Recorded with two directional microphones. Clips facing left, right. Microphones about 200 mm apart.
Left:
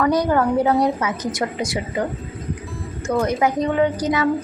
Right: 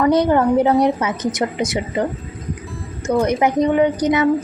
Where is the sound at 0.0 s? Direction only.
25° right (ahead or behind).